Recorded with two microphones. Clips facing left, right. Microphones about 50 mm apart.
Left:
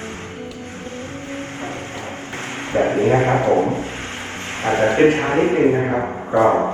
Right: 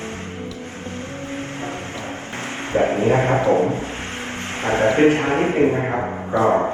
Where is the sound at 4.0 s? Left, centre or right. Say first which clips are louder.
Even; right.